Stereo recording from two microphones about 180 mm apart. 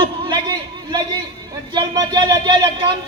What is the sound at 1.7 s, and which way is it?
A man's voice, 25° right (ahead or behind).